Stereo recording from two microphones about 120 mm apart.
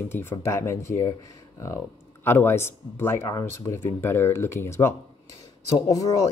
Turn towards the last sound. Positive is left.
turn(degrees=30)  # may be behind; listen again after turning